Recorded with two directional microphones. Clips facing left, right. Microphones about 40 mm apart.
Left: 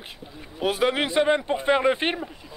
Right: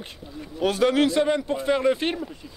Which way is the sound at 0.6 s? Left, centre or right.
Centre.